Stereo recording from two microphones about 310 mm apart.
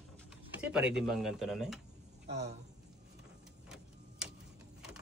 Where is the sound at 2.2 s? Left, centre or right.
Right.